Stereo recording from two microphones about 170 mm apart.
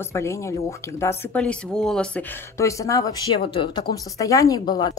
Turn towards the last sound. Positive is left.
turn(degrees=20)  # may be behind; listen again after turning